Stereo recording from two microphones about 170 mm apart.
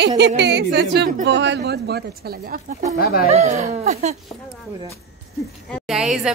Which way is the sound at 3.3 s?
40° right (ahead or behind).